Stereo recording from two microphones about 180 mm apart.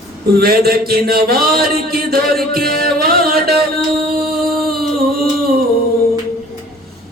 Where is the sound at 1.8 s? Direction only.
55° right (ahead or behind).